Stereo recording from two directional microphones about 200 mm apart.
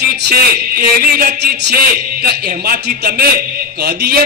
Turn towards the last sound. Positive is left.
turn(degrees=-55)  # may be behind; listen again after turning